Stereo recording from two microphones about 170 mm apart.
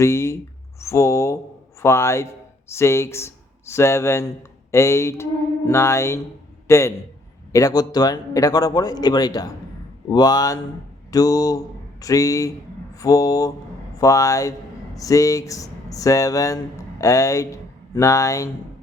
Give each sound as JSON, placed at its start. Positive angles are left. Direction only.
{"t": 0.0, "sound": "speech", "side_deg": 15}